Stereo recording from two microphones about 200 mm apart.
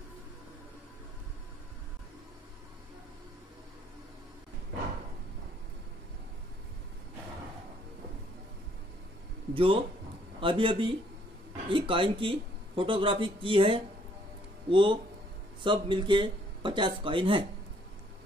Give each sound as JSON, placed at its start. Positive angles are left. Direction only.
{"t": 9.5, "sound": "a man's voice", "side_deg": -25}